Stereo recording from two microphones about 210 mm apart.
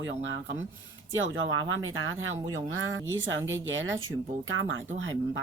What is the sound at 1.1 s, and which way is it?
Speech, 65° right (ahead or behind).